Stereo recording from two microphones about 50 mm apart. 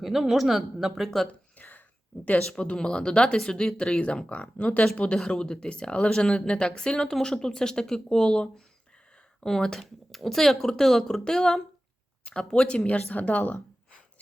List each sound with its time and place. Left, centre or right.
0.0 s speech: centre
1.6 s a sound: left
2.5 s speech: centre
4.3 s speech: left